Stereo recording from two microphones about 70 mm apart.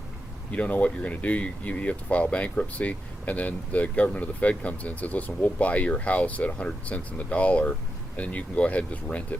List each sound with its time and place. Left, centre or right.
0.5 s speech: centre